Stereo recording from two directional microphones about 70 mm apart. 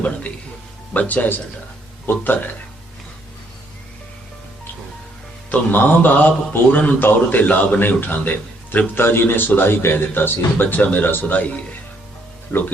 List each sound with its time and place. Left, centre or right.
0.0 s a man's voice: centre
5.5 s a man's voice: left